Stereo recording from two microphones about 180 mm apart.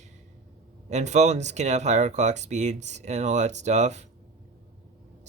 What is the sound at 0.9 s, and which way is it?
Speech, 40° right (ahead or behind).